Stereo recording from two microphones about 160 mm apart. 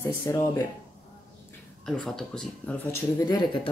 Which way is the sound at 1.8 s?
5° left (ahead or behind).